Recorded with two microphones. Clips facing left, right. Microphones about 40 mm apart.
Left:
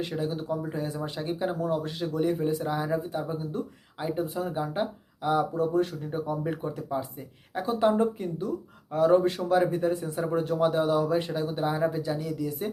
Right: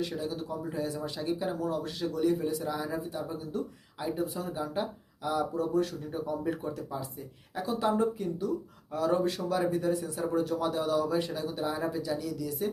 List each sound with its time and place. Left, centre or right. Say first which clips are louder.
0.1 s speech: left 4 dB; left